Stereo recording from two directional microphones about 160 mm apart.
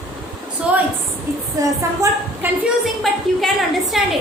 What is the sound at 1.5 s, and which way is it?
Speech, 20° right (ahead or behind).